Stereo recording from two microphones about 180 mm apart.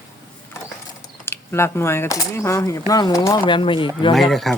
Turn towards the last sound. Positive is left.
turn(degrees=0)  # may be behind; listen again after turning